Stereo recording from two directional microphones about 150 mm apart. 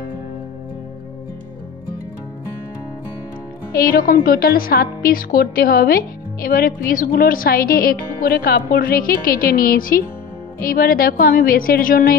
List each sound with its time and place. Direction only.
3.7 s a woman's voice: 80° left